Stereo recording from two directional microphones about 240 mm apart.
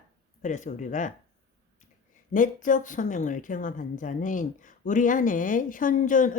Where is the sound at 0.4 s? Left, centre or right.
Left.